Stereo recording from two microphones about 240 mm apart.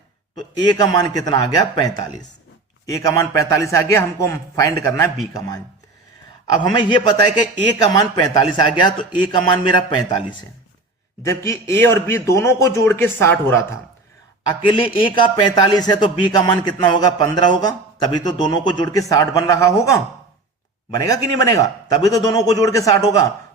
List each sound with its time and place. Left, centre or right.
0.5 s speech: centre
6.5 s a man's voice: centre
9.9 s speech: centre
11.2 s speech: centre
14.6 s a man's voice: left